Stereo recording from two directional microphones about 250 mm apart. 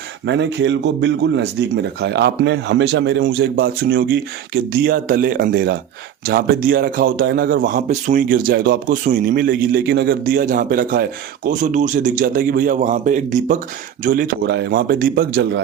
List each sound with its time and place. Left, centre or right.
0.3 s a man's voice: right